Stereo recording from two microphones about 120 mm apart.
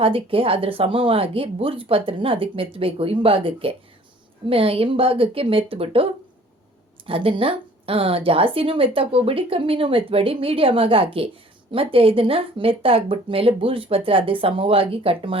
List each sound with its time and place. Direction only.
0.0 s a woman's voice: 50° right (ahead or behind)
7.1 s a woman's voice: 50° right (ahead or behind)